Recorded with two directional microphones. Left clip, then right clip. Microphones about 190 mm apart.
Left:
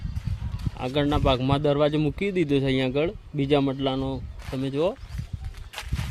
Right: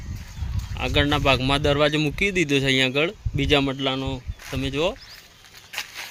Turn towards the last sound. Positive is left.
turn(degrees=15)  # may be behind; listen again after turning